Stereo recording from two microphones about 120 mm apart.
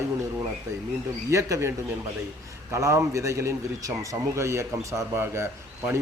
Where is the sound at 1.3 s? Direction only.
25° right (ahead or behind).